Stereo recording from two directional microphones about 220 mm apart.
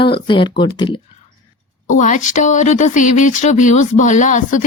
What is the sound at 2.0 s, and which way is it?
Speech, 35° left (ahead or behind).